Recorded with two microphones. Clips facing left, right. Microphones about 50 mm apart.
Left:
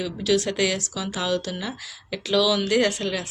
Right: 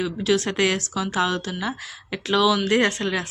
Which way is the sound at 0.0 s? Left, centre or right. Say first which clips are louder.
Right 1 dB; right.